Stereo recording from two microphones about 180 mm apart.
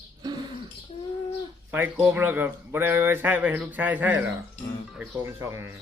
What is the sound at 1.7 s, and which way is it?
A man's voice, 10° right (ahead or behind).